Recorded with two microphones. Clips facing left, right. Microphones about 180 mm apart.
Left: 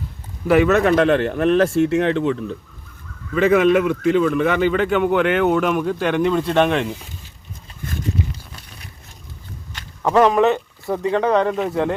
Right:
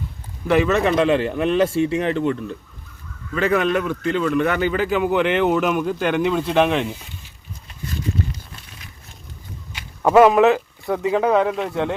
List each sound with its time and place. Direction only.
0.4 s a man's voice: centre (ahead or behind)
9.7 s speech: 10° right (ahead or behind)